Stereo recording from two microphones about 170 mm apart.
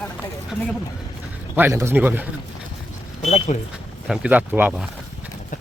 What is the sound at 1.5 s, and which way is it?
Speech, 15° right (ahead or behind).